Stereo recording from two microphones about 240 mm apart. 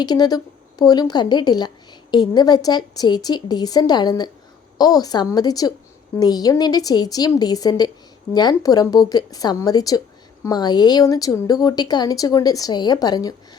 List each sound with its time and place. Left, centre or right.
0.0 s a woman's voice: centre